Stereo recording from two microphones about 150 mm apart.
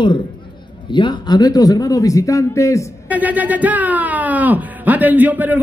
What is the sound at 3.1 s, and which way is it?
Speech, 10° right (ahead or behind).